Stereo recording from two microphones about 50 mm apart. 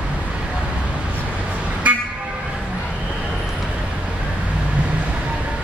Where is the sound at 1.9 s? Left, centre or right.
Right.